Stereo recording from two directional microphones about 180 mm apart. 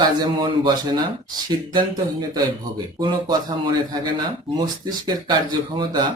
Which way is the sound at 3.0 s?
25° right (ahead or behind).